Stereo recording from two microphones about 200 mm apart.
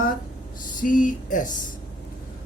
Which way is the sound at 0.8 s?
40° left (ahead or behind).